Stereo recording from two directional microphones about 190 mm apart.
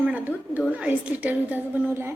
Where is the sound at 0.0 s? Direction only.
10° right (ahead or behind).